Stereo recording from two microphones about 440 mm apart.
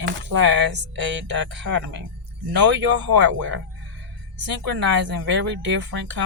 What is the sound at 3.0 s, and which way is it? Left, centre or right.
Speech, right.